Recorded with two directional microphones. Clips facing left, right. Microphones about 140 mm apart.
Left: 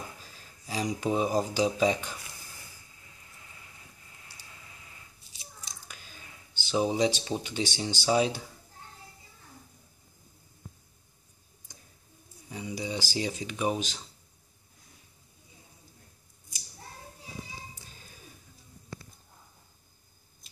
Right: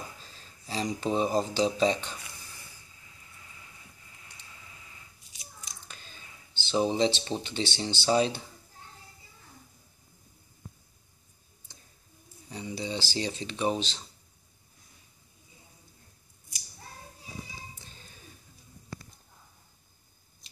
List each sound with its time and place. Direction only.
0.2 s speech: 10° left (ahead or behind)
5.9 s speech: 10° left (ahead or behind)
12.4 s speech: 10° left (ahead or behind)